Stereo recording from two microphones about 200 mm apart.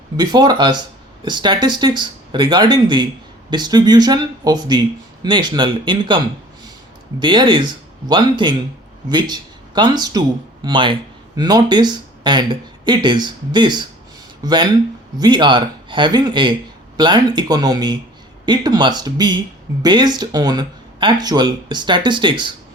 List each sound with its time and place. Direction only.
0.2 s speech: 20° right (ahead or behind)